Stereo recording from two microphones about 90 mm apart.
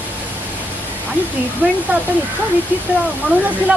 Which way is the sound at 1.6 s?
15° right (ahead or behind).